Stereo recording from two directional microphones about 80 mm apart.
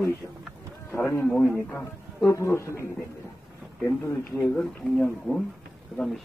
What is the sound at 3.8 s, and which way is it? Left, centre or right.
Speech, left.